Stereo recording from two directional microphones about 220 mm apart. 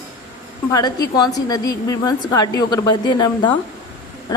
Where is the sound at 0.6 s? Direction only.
15° left (ahead or behind).